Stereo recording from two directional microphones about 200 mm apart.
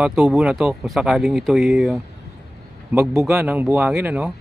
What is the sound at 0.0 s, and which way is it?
Speech, centre (ahead or behind).